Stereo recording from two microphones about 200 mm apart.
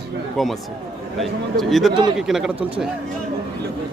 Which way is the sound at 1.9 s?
25° right (ahead or behind).